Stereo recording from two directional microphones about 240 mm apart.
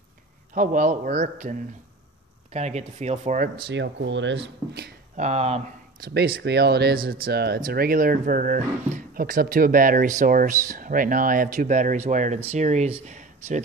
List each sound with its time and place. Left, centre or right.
0.6 s speech: right
4.7 s speech: right
5.9 s speech: right